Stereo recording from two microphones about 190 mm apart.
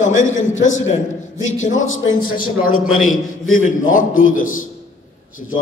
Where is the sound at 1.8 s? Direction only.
90° left.